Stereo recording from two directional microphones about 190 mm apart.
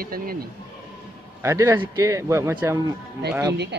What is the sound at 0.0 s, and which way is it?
Speech, 50° right (ahead or behind).